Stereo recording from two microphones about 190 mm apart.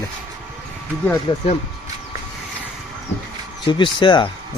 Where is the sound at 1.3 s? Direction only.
25° left (ahead or behind).